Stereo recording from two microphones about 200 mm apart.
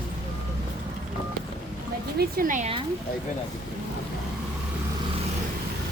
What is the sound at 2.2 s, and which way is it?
Speech, 45° right (ahead or behind).